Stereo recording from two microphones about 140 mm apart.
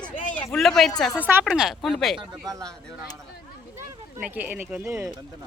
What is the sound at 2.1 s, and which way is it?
Speech, 25° right (ahead or behind).